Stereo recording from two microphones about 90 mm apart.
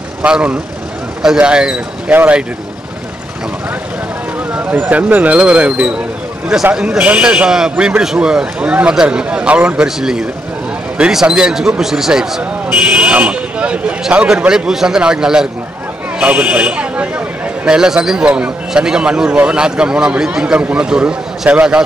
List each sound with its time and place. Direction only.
0.2 s a man's voice: 15° right (ahead or behind)
4.5 s a man's voice: 15° right (ahead or behind)